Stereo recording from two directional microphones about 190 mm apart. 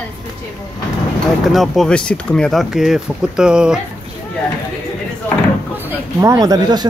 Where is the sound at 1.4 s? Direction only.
Centre (ahead or behind).